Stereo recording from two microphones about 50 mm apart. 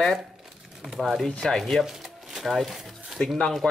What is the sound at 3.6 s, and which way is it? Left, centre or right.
Speech, left.